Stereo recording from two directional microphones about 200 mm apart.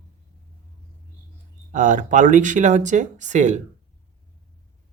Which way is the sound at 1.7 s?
40° right (ahead or behind).